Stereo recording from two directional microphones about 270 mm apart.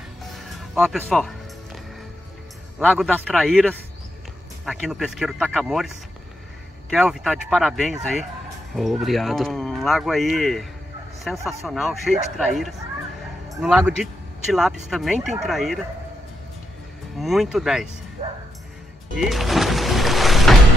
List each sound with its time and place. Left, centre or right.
0.7 s speech: centre
2.8 s speech: centre
17.2 s speech: centre
18.2 s music: right
19.1 s music: centre